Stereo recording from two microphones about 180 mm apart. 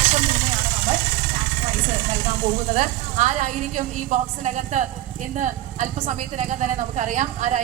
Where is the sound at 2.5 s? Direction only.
45° right (ahead or behind).